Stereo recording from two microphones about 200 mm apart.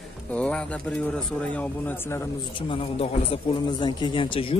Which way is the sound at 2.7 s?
30° left (ahead or behind).